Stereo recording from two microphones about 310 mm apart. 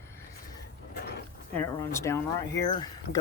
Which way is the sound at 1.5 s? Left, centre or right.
Centre.